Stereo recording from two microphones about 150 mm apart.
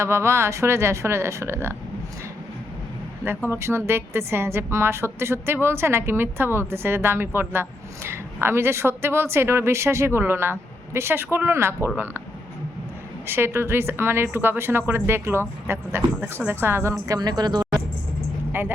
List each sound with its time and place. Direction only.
0.0 s a woman's voice: 20° right (ahead or behind)
3.5 s a woman's voice: 15° right (ahead or behind)
13.2 s a woman's voice: 15° right (ahead or behind)